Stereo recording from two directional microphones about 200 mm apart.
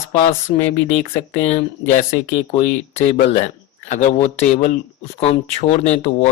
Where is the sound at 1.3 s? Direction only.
35° left (ahead or behind).